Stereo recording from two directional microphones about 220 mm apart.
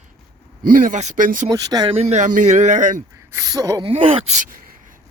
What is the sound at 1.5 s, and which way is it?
Speech, 15° right (ahead or behind).